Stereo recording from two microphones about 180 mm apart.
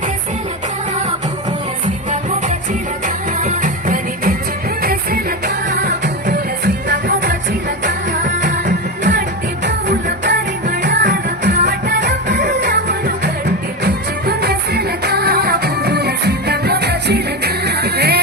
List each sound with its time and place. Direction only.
3.4 s music: 50° right (ahead or behind)
10.7 s music: 60° right (ahead or behind)